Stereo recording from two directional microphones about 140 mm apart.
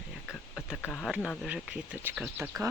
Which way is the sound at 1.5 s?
10° right (ahead or behind).